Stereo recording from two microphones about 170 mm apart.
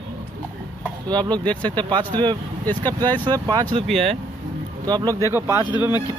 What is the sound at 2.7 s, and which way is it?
Speech, 10° left (ahead or behind).